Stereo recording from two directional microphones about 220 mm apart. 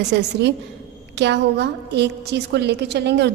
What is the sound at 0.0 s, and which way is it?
A woman's voice, 50° right (ahead or behind).